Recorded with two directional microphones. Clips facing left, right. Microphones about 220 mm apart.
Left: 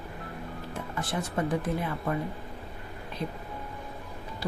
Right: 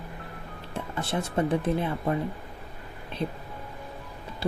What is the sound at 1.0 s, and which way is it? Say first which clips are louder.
Speech: right 3 dB; 25° right (ahead or behind).